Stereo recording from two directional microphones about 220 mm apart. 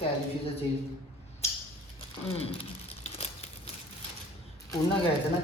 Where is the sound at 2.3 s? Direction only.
25° left (ahead or behind).